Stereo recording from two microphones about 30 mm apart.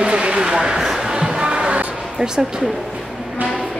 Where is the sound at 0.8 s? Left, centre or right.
Centre.